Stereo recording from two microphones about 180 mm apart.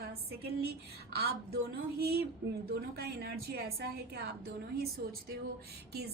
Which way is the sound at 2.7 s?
60° right (ahead or behind).